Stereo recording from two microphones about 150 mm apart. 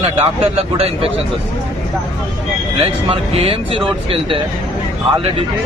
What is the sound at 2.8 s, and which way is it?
Speech, 40° right (ahead or behind).